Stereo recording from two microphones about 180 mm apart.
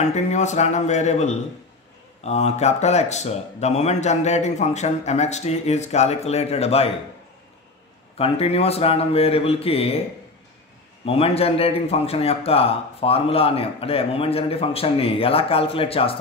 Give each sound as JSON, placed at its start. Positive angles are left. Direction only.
{"t": 0.0, "sound": "a man's voice", "side_deg": 40}
{"t": 8.2, "sound": "a man's voice", "side_deg": 35}
{"t": 11.1, "sound": "a man's voice", "side_deg": 35}